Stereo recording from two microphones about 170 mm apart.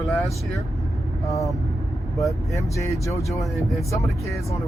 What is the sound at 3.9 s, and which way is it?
Speech, 20° left (ahead or behind).